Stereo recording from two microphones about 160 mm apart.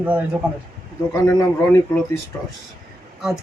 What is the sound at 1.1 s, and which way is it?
Speech, 15° left (ahead or behind).